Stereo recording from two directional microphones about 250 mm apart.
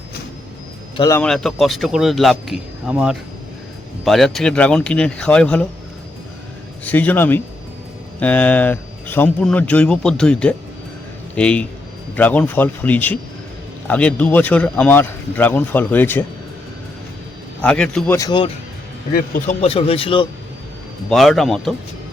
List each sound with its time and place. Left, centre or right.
0.9 s speech: centre
1.2 s speech: centre
6.8 s speech: centre
17.6 s speech: centre
19.1 s a man's voice: left
19.6 s a man's voice: left
21.1 s speech: centre